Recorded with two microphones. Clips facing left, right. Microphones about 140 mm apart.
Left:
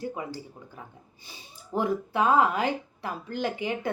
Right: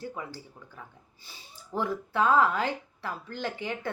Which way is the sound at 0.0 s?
15° left (ahead or behind).